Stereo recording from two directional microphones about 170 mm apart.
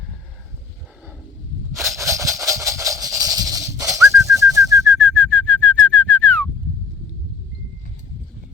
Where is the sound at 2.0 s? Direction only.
15° right (ahead or behind).